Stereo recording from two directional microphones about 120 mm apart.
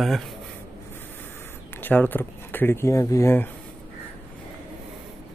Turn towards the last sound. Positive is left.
turn(degrees=25)  # may be behind; listen again after turning